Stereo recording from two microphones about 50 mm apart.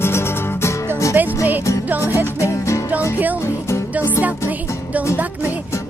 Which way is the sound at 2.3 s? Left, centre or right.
Left.